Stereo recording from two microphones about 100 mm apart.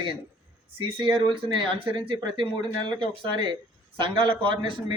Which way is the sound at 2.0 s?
50° right (ahead or behind).